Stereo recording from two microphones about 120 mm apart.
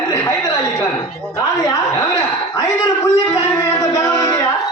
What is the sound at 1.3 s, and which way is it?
A man's voice, 35° left (ahead or behind).